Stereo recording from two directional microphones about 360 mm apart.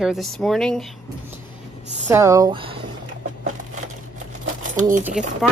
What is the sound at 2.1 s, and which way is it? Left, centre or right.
Speech, centre.